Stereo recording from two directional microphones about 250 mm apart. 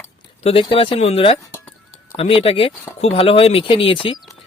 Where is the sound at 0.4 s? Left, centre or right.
Left.